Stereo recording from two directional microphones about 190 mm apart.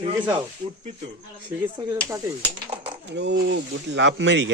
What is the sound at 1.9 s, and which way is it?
Speech, 15° right (ahead or behind).